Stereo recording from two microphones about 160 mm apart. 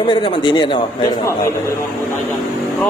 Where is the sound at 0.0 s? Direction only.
30° left (ahead or behind).